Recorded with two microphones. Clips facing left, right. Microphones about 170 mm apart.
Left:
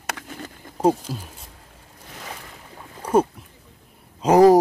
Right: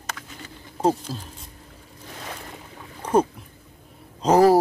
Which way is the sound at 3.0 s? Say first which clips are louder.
Left 1 dB; 10° left (ahead or behind).